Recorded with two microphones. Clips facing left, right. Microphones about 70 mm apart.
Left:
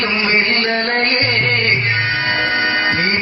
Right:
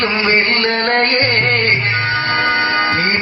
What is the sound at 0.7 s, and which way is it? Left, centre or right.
Music, right.